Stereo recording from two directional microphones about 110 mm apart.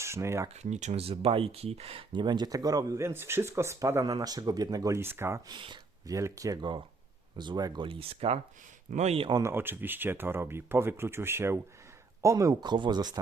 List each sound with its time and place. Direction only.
0.0 s speech: 25° right (ahead or behind)
0.5 s speech: 90° right; by 2.2 s 60° right (ahead or behind)
2.2 s speech: 40° right (ahead or behind); by 5.4 s 20° right (ahead or behind)
5.5 s speech: 45° right (ahead or behind)
6.1 s speech: 30° right (ahead or behind)
7.9 s speech: 60° right (ahead or behind)
9.4 s speech: 20° right (ahead or behind); by 13.1 s 40° right (ahead or behind)